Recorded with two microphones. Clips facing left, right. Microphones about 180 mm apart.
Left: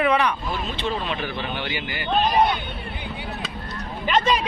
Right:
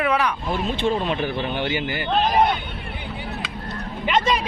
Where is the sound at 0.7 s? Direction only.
50° right (ahead or behind).